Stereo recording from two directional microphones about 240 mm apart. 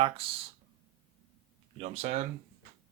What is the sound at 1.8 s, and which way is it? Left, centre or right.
Speech, right.